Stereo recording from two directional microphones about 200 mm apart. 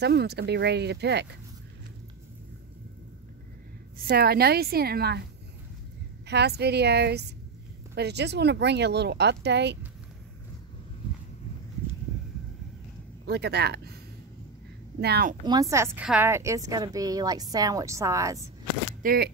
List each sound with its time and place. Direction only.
0.0 s speech: 55° right (ahead or behind)
4.0 s a woman's voice: 50° right (ahead or behind)
6.2 s speech: 55° right (ahead or behind)
13.2 s speech: 55° right (ahead or behind)
15.0 s a woman's voice: 55° right (ahead or behind)
15.4 s a woman's voice: 15° right (ahead or behind)
19.0 s a woman's voice: 50° right (ahead or behind)